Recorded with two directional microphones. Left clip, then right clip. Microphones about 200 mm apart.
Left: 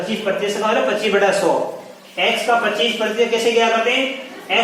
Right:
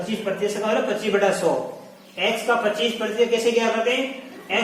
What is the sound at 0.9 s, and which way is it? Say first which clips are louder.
Speech: left 5 dB; 15° left (ahead or behind).